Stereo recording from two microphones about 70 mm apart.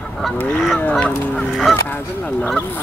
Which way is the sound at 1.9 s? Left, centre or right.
Left.